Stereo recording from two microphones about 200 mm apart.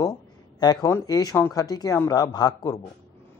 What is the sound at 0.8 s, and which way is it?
Speech, 15° left (ahead or behind).